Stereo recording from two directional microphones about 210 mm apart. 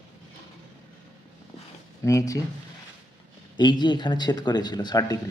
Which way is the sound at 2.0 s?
15° left (ahead or behind).